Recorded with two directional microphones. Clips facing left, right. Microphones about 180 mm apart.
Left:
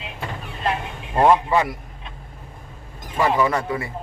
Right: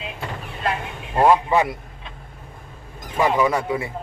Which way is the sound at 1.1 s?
5° right (ahead or behind).